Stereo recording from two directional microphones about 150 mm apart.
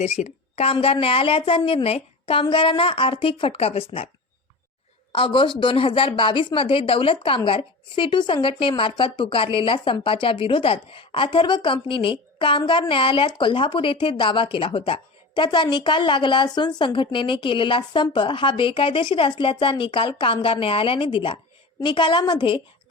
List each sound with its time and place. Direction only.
0.0 s speech: 45° left (ahead or behind)
5.1 s speech: 35° left (ahead or behind)